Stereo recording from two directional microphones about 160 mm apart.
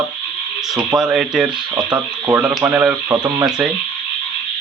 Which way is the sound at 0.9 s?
5° right (ahead or behind).